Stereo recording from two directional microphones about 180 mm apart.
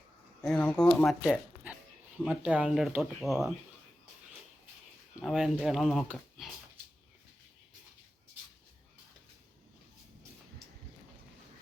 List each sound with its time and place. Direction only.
0.4 s speech: 5° left (ahead or behind)
1.2 s zipper: 5° right (ahead or behind)
2.2 s speech: 5° right (ahead or behind)
5.2 s speech: centre (ahead or behind)